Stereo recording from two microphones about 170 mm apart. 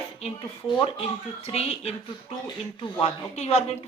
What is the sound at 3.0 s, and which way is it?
Speech, 40° left (ahead or behind).